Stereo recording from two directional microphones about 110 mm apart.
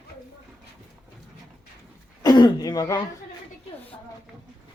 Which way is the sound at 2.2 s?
40° left (ahead or behind).